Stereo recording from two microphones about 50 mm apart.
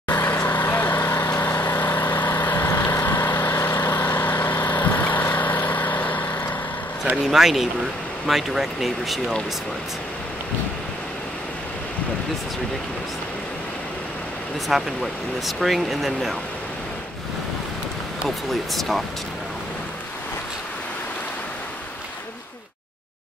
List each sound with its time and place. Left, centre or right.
0.1 s vehicle: left
7.2 s speech: centre
14.7 s speech: centre
18.5 s speech: centre